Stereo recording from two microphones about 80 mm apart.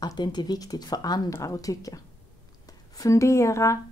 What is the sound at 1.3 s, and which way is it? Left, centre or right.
Speech, left.